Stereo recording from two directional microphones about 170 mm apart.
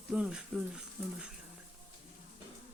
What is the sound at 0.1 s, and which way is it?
Speech, 5° right (ahead or behind).